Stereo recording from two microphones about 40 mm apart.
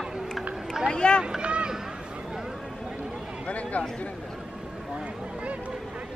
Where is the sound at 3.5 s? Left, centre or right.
Left.